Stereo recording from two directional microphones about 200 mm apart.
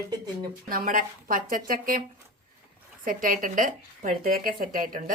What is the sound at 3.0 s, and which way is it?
Speech, 45° right (ahead or behind).